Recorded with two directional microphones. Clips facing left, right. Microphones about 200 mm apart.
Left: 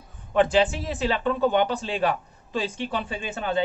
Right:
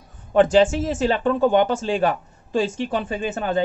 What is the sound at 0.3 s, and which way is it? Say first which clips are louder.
Speech: right 5 dB; 45° right (ahead or behind).